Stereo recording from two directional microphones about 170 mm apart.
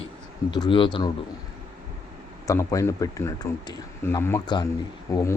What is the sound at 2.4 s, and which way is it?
Speech, 20° left (ahead or behind).